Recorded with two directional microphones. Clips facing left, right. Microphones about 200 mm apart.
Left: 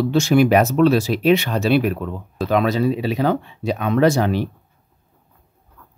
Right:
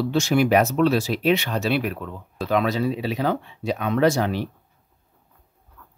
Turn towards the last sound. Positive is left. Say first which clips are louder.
# left 3 dB
turn(degrees=55)  # may be behind; listen again after turning